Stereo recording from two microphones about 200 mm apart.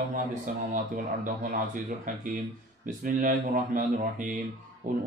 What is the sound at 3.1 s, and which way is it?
Speech, 40° right (ahead or behind).